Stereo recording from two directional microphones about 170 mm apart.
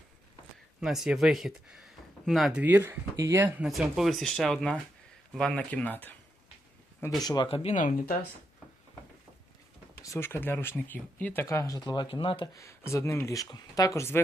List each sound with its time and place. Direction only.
0.8 s speech: centre (ahead or behind)
2.6 s speech: 10° right (ahead or behind); by 6.1 s 10° left (ahead or behind)
7.2 s speech: 25° left (ahead or behind); by 8.2 s 55° left (ahead or behind)
10.0 s speech: 15° left (ahead or behind)
12.5 s speech: 15° left (ahead or behind)